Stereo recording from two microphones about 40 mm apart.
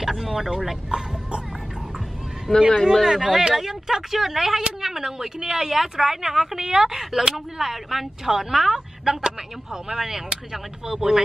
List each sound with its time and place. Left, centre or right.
0.0 s speech: centre
2.5 s speech: centre
3.1 s speech: centre